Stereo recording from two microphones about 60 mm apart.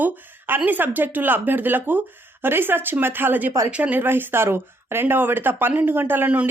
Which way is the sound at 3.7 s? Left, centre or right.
Right.